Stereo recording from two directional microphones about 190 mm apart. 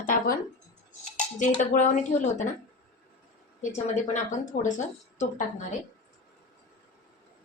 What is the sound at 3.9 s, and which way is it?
Speech, 40° left (ahead or behind).